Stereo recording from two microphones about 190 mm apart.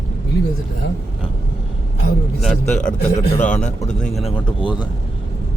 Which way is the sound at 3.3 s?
40° left (ahead or behind).